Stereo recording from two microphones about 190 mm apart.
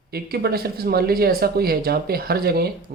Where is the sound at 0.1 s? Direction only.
55° right (ahead or behind).